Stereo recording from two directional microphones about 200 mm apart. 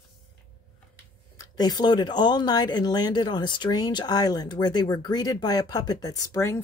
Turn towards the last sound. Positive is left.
turn(degrees=15)  # may be behind; listen again after turning